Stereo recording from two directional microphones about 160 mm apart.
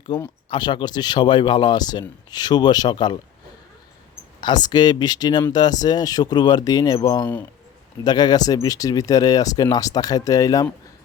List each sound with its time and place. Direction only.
0.5 s speech: 30° left (ahead or behind)
4.4 s speech: 25° left (ahead or behind)